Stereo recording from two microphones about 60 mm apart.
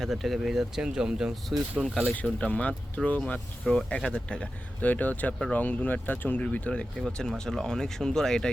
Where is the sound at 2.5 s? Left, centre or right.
Left.